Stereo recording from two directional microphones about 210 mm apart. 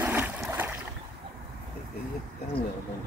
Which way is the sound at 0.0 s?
10° right (ahead or behind).